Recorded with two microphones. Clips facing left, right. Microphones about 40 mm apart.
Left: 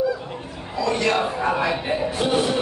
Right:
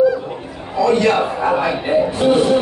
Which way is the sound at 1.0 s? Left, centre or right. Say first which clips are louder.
Right 5 dB; centre.